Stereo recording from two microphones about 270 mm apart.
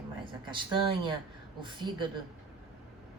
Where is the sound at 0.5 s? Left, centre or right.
Centre.